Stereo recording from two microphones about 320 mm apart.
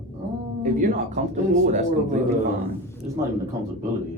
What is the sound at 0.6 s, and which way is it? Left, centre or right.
Speech, right.